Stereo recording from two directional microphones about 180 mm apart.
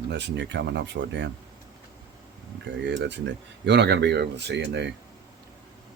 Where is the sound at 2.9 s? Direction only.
75° right (ahead or behind).